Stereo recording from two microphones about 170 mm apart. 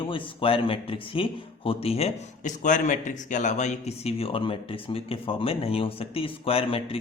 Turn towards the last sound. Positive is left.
turn(degrees=35)  # may be behind; listen again after turning